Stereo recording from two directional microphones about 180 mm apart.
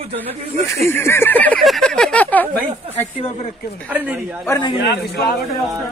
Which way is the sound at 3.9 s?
10° right (ahead or behind).